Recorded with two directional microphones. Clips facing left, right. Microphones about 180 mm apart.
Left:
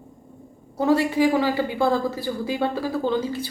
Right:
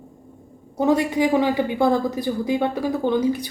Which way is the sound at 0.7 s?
20° right (ahead or behind).